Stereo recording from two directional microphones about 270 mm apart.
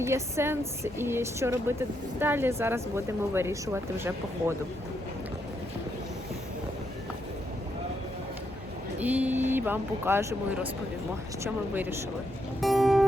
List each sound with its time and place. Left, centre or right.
0.0 s speech: centre
9.0 s speech: centre
12.5 s music: centre